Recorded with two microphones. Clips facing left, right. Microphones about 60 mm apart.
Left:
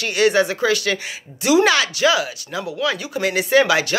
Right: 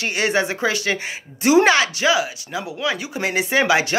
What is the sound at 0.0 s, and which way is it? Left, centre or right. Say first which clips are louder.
Speech: left 4 dB; right.